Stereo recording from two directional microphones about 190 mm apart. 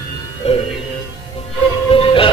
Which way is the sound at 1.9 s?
25° left (ahead or behind).